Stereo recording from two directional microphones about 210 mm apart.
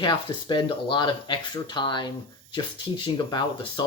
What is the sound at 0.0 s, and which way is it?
Speech, 20° left (ahead or behind).